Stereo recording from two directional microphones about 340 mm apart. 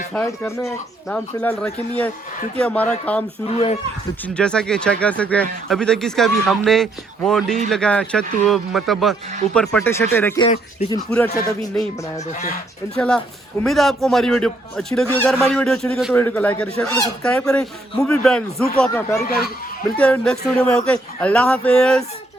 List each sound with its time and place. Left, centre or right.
0.1 s speech: centre
4.4 s speech: centre
12.1 s speech: left
13.0 s speech: centre